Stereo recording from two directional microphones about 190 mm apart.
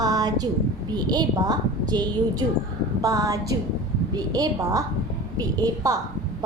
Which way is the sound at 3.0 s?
20° right (ahead or behind).